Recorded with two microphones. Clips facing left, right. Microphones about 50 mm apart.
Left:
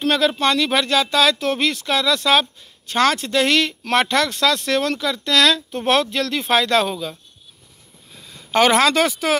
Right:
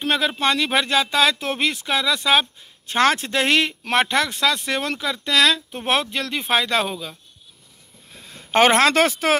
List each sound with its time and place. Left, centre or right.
0.0 s speech: centre
2.9 s speech: right; by 7.2 s centre
8.1 s speech: right